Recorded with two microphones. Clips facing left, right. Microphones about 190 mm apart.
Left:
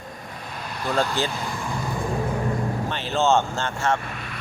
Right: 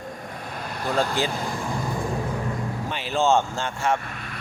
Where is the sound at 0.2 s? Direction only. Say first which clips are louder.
Right 2 dB; 50° right (ahead or behind).